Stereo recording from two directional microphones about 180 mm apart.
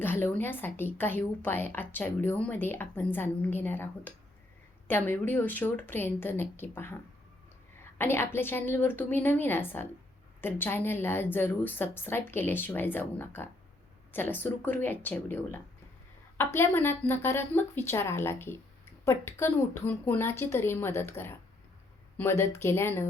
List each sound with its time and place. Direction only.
0.0 s a woman's voice: 10° left (ahead or behind)
7.9 s a woman's voice: 15° left (ahead or behind)